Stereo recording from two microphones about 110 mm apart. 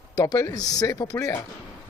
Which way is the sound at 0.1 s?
30° left (ahead or behind).